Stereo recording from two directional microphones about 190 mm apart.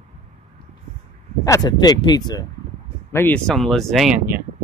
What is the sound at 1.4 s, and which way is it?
Speech, 20° left (ahead or behind).